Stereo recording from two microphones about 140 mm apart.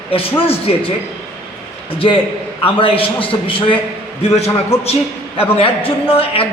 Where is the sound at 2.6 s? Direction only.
40° left (ahead or behind).